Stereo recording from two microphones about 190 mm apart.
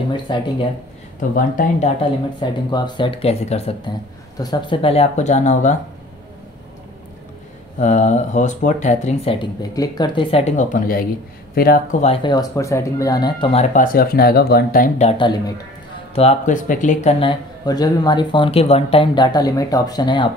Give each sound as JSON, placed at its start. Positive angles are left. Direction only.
{"t": 0.1, "sound": "speech", "side_deg": 25}
{"t": 1.3, "sound": "speech", "side_deg": 45}
{"t": 2.7, "sound": "speech", "side_deg": 25}
{"t": 7.8, "sound": "speech", "side_deg": 40}
{"t": 12.0, "sound": "speech", "side_deg": 30}
{"t": 13.7, "sound": "speech", "side_deg": 50}
{"t": 15.0, "sound": "speech", "side_deg": 25}
{"t": 16.2, "sound": "speech", "side_deg": 35}
{"t": 17.2, "sound": "speech", "side_deg": 25}